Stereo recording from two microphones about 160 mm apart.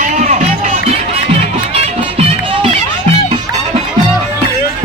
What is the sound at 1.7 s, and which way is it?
Music, 40° right (ahead or behind).